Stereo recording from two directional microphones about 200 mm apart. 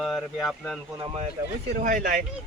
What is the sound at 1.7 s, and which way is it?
Speech, 45° right (ahead or behind).